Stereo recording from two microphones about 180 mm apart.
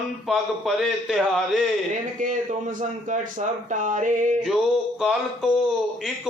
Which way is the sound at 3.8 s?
45° right (ahead or behind).